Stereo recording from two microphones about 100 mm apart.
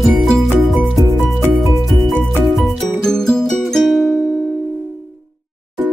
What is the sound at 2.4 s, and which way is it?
Music, centre (ahead or behind).